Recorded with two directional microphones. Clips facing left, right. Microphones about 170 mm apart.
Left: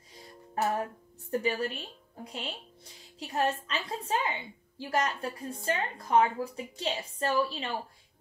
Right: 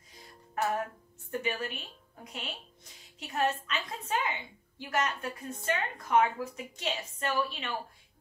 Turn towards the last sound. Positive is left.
turn(degrees=35)  # may be behind; listen again after turning